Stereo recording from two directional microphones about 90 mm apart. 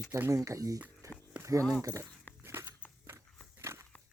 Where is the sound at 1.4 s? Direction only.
35° right (ahead or behind).